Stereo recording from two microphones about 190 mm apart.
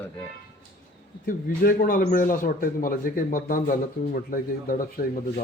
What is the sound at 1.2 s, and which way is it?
Speech, 45° left (ahead or behind).